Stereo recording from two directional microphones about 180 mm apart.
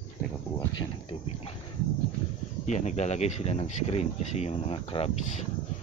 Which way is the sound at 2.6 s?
40° left (ahead or behind).